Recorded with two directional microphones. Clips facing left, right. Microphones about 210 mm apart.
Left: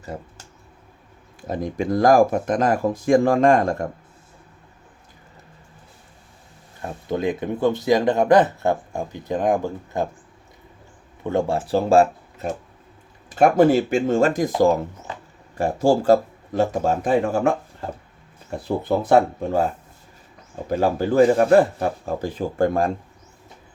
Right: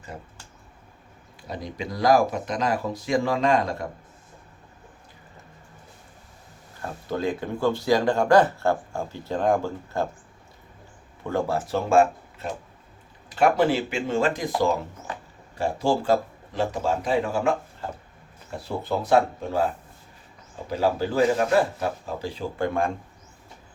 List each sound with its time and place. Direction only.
1.4 s speech: 50° left (ahead or behind)
6.8 s speech: 20° left (ahead or behind)
11.2 s speech: 20° left (ahead or behind)
13.3 s speech: 45° left (ahead or behind)
15.5 s speech: 45° left (ahead or behind)
18.8 s speech: 55° left (ahead or behind)
20.7 s speech: 50° left (ahead or behind)